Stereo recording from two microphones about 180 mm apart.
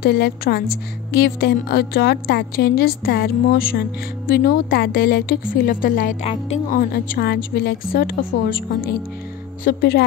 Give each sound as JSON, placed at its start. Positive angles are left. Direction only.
{"t": 0.0, "sound": "a woman's voice", "side_deg": 60}
{"t": 6.2, "sound": "speech", "side_deg": 35}
{"t": 6.8, "sound": "a woman's voice", "side_deg": 55}